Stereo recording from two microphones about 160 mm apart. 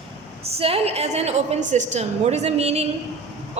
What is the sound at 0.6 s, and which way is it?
A woman's voice, 35° right (ahead or behind).